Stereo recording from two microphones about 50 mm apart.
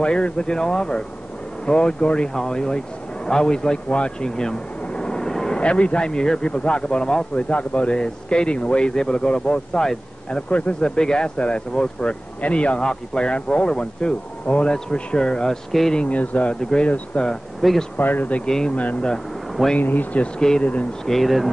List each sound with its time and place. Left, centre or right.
0.0 s speech: left
5.6 s speech: left
17.6 s speech: centre
17.9 s speech: left
18.4 s speech: centre
18.8 s speech: left
20.3 s speech: centre